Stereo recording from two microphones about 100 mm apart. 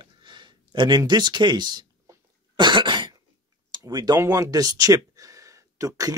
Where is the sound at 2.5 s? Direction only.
50° right (ahead or behind).